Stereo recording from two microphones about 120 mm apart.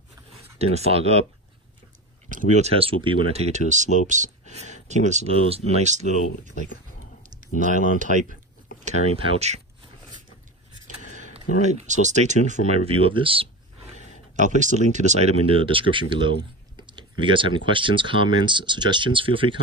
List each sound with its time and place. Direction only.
0.6 s speech: 60° right (ahead or behind)
2.3 s speech: 80° right
2.7 s speech: 50° right (ahead or behind)
3.5 s speech: 85° right
5.3 s speech: 55° right (ahead or behind); by 6.5 s 75° right (ahead or behind)
7.2 s a sound: 90° right
8.0 s speech: 90° right
9.1 s speech: 60° right (ahead or behind)
11.1 s speech: 80° right
12.8 s speech: 50° right (ahead or behind)
14.3 s speech: 90° right; by 19.6 s 45° right (ahead or behind)